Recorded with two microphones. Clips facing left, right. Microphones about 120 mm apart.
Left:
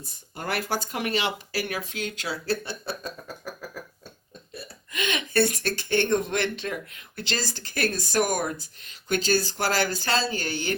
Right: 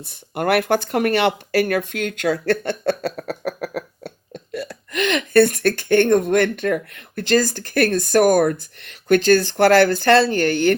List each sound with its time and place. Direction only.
0.0 s speech: 65° right (ahead or behind)
4.5 s speech: 85° right; by 10.8 s 55° right (ahead or behind)